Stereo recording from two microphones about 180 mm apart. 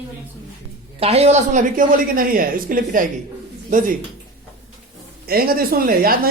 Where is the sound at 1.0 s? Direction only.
35° right (ahead or behind).